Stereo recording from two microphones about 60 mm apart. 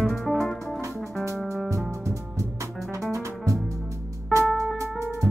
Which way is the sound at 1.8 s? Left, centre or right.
Right.